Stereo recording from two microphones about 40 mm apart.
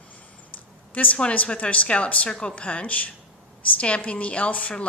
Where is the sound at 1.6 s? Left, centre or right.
Left.